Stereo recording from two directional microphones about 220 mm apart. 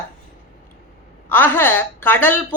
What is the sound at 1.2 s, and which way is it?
Speech, 10° left (ahead or behind).